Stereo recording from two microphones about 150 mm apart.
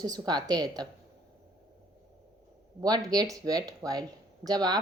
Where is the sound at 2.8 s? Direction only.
25° right (ahead or behind).